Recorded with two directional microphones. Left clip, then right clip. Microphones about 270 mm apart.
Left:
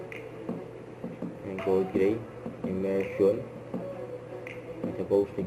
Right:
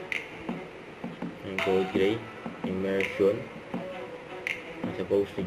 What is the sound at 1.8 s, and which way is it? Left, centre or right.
Speech, centre.